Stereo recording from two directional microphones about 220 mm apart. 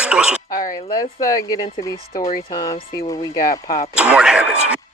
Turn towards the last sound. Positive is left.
turn(degrees=-5)  # may be behind; listen again after turning